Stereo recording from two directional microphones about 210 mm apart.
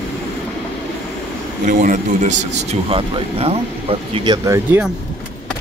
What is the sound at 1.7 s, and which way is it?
Speech, 35° right (ahead or behind).